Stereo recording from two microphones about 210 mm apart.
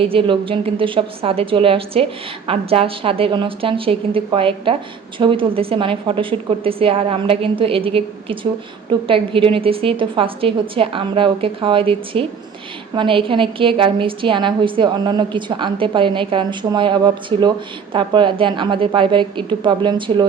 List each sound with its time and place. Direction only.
0.0 s a woman's voice: 25° right (ahead or behind)